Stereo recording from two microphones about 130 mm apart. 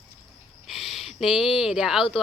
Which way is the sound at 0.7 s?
Centre (ahead or behind).